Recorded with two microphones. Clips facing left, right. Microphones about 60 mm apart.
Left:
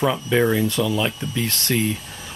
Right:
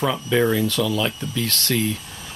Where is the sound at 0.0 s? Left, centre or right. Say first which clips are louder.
Left 1 dB; centre.